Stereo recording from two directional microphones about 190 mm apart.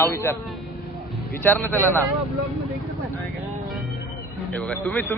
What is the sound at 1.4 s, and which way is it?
Speech, 10° left (ahead or behind).